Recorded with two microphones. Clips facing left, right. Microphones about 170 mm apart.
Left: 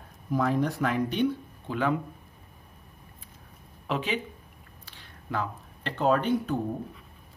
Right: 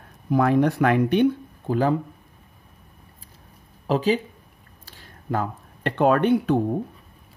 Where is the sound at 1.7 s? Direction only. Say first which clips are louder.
Right 6 dB; 35° right (ahead or behind).